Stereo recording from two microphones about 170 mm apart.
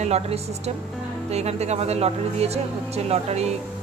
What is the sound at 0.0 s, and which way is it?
A woman's voice, 40° right (ahead or behind).